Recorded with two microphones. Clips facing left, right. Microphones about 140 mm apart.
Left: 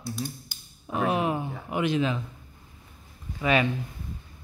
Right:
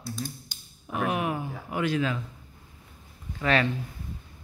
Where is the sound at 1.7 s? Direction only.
20° left (ahead or behind).